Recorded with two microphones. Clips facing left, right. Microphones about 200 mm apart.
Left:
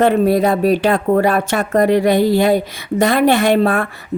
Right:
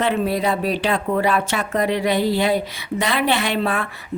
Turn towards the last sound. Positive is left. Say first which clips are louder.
# left 8 dB
turn(degrees=50)  # may be behind; listen again after turning